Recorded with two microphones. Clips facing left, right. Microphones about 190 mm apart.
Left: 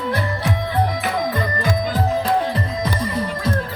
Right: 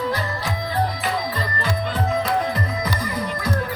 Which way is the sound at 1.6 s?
45° left (ahead or behind).